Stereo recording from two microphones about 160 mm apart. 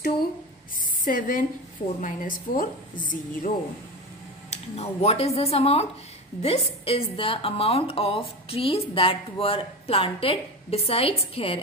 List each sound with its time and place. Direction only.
1.0 s a woman's voice: 60° left (ahead or behind)
4.5 s a woman's voice: 40° left (ahead or behind)